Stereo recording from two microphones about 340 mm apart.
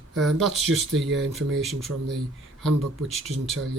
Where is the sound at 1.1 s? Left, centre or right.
Right.